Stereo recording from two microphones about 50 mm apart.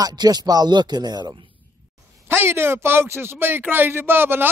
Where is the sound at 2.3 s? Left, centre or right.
Right.